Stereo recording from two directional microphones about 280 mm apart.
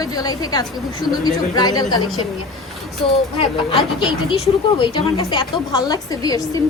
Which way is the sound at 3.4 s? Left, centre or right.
Centre.